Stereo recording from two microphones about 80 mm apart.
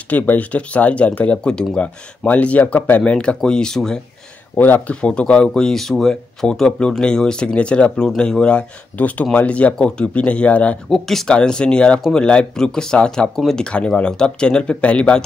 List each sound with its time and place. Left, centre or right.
0.1 s speech: centre
4.6 s speech: left
10.9 s speech: centre